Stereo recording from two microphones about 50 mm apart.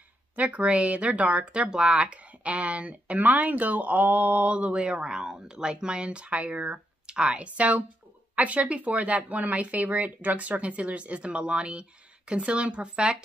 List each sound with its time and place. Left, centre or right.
0.4 s speech: right